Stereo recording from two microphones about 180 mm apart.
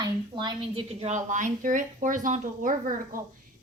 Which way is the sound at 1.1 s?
45° right (ahead or behind).